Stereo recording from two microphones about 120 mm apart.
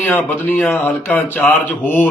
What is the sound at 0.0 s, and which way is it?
A man's voice, 15° left (ahead or behind).